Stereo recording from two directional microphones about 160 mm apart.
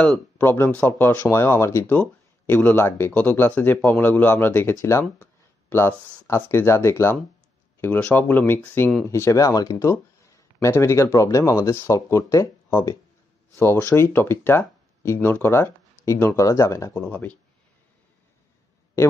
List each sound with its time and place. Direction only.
0.4 s speech: 15° left (ahead or behind)
19.0 s speech: 15° left (ahead or behind)